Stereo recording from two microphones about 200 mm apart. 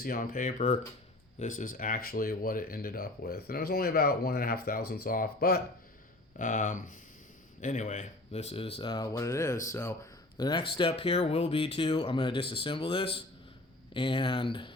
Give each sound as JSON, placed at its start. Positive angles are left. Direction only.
{"t": 0.0, "sound": "speech", "side_deg": 45}